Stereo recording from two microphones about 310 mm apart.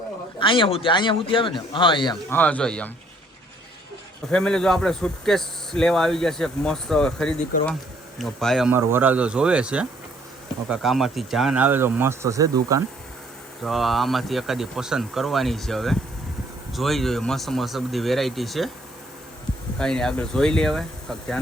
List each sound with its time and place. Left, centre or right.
0.3 s speech: centre
4.3 s speech: centre
13.6 s speech: centre
19.8 s speech: centre